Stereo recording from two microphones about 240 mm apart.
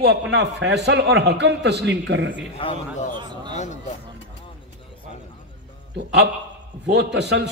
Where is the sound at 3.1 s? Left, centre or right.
Centre.